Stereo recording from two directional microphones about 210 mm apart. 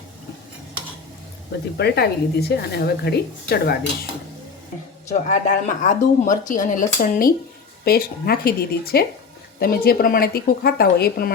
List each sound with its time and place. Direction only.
1.8 s a woman's voice: 50° left (ahead or behind)
5.1 s a woman's voice: 35° left (ahead or behind)